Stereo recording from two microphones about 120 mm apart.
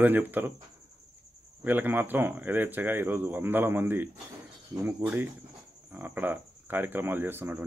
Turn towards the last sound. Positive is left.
turn(degrees=-15)  # may be behind; listen again after turning